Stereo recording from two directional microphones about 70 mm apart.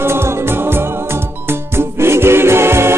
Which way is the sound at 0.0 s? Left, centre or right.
Right.